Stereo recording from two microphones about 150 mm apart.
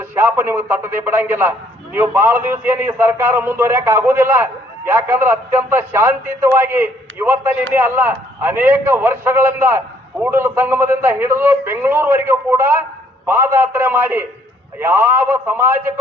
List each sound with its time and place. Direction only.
0.0 s a man's voice: 15° right (ahead or behind)